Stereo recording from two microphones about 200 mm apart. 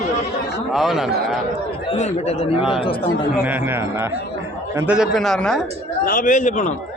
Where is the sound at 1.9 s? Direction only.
35° left (ahead or behind).